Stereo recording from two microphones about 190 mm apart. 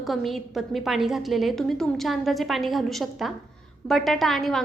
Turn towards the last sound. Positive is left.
turn(degrees=0)  # may be behind; listen again after turning